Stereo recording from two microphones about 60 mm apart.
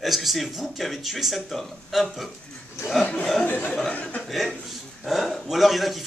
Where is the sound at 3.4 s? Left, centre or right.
Left.